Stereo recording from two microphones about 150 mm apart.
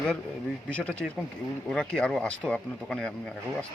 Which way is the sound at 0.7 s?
10° left (ahead or behind).